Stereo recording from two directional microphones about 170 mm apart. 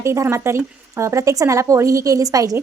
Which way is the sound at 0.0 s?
15° right (ahead or behind).